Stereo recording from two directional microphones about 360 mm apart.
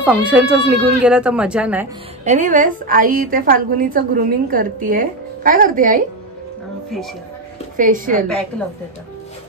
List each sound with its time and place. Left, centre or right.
0.0 s speech: centre
2.2 s a woman's voice: right
7.7 s a woman's voice: right